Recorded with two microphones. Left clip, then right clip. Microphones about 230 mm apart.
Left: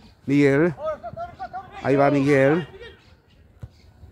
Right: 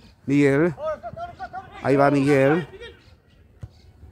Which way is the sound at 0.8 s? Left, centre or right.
Right.